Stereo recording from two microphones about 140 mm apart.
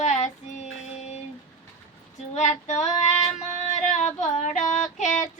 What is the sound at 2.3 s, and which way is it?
Female singing, 55° left (ahead or behind).